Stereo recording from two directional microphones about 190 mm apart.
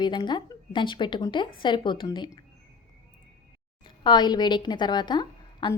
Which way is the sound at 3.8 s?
25° left (ahead or behind).